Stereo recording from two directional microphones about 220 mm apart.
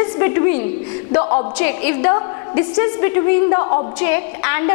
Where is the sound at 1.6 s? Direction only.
15° left (ahead or behind).